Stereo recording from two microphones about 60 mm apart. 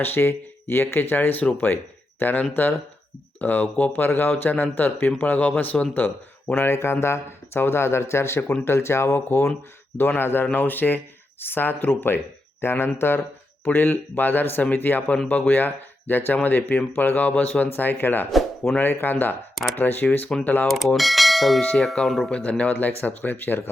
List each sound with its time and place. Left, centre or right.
0.0 s speech: left
17.7 s speech: left
20.7 s bell: centre
22.0 s speech: centre
22.3 s speech: left